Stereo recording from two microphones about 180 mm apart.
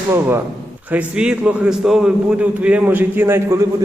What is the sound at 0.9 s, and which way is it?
A man's voice, 5° right (ahead or behind).